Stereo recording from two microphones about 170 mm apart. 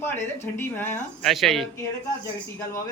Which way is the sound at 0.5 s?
15° left (ahead or behind).